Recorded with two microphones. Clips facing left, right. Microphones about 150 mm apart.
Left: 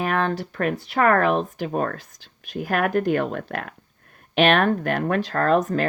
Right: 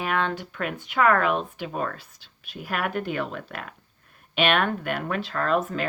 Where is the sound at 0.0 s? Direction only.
40° left (ahead or behind).